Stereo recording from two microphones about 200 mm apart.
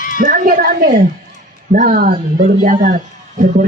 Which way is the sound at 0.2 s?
45° right (ahead or behind).